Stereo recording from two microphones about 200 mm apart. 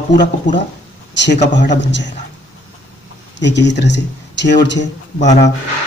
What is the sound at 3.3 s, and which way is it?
Speech, 60° left (ahead or behind).